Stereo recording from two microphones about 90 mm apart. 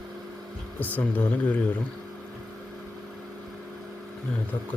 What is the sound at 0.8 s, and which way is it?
Speech, 20° left (ahead or behind).